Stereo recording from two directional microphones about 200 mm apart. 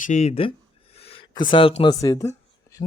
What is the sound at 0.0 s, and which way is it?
Speech, 35° left (ahead or behind).